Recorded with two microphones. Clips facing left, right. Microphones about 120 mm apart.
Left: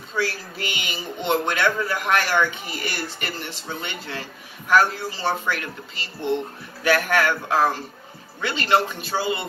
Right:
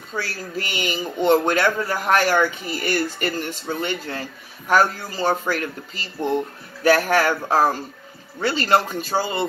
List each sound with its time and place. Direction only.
0.1 s speech: 40° right (ahead or behind)